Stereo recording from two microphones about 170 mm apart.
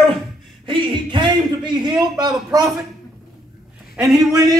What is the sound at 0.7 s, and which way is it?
A man's voice, 30° right (ahead or behind).